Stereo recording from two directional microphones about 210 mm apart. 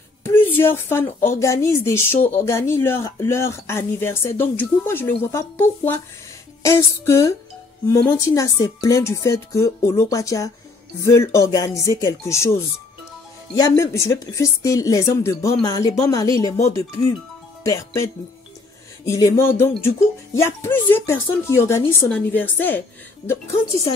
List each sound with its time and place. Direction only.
0.2 s speech: 10° left (ahead or behind)
13.6 s speech: 15° left (ahead or behind)
19.0 s speech: 15° left (ahead or behind)